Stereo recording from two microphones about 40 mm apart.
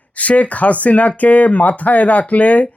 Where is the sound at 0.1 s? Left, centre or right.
Left.